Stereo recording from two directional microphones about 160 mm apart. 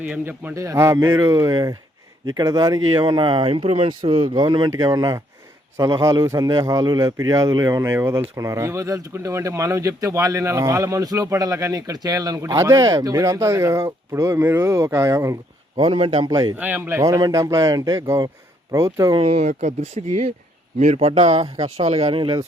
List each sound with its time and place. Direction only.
0.1 s a man's voice: 15° right (ahead or behind)
15.7 s speech: 35° right (ahead or behind)
16.6 s a man's voice: 10° right (ahead or behind)
19.2 s speech: 40° right (ahead or behind)